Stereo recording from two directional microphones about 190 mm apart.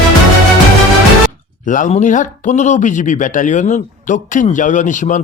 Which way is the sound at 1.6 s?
40° left (ahead or behind).